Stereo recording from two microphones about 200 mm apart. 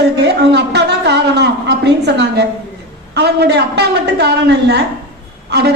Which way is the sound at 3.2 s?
55° right (ahead or behind).